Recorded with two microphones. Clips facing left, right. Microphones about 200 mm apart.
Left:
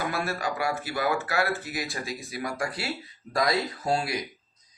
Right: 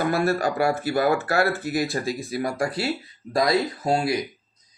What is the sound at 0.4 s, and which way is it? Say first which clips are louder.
Speech: right 7 dB; 45° right (ahead or behind).